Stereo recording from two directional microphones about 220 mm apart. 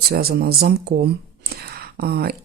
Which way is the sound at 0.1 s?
45° right (ahead or behind).